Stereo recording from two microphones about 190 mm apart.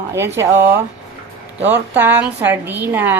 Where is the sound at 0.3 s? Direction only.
10° right (ahead or behind).